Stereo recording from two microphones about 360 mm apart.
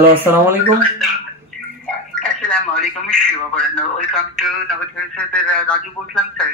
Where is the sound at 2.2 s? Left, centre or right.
Centre.